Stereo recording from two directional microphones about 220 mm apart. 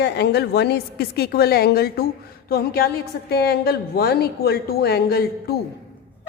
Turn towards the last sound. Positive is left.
turn(degrees=45)  # may be behind; listen again after turning